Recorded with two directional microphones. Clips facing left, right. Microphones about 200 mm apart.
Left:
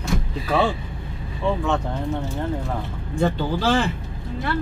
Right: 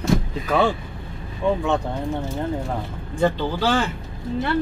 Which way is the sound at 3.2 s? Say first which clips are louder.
Right 1 dB; centre (ahead or behind).